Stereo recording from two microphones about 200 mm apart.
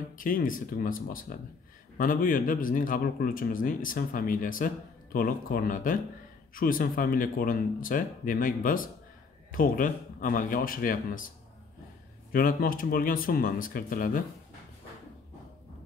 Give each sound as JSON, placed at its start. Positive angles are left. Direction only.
{"t": 0.2, "sound": "speech", "side_deg": 45}
{"t": 12.3, "sound": "speech", "side_deg": 45}